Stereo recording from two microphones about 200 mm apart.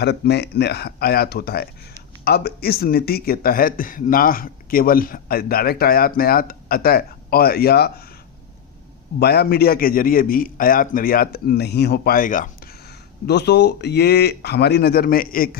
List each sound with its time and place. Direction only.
0.0 s a man's voice: 55° left (ahead or behind)
9.1 s a man's voice: 55° left (ahead or behind)
13.2 s speech: 55° left (ahead or behind)